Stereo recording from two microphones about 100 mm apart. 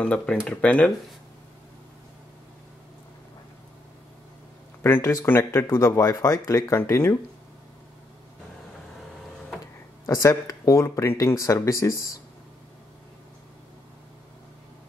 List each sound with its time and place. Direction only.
0.0 s speech: 10° left (ahead or behind)
4.8 s speech: 20° left (ahead or behind)
10.0 s speech: 30° left (ahead or behind)